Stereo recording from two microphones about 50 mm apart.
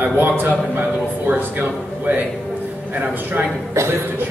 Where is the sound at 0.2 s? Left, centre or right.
Right.